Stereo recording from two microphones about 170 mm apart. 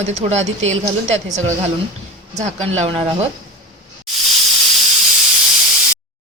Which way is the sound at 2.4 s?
35° right (ahead or behind).